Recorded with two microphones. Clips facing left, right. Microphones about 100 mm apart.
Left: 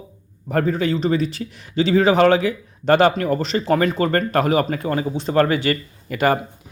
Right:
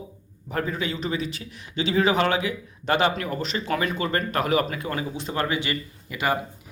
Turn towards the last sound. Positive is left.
turn(degrees=50)  # may be behind; listen again after turning